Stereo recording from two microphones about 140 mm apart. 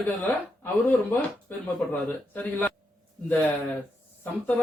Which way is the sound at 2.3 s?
15° left (ahead or behind).